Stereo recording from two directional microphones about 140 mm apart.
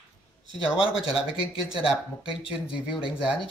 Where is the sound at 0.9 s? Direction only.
40° left (ahead or behind).